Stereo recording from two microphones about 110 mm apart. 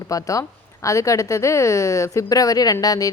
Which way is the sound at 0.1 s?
30° left (ahead or behind).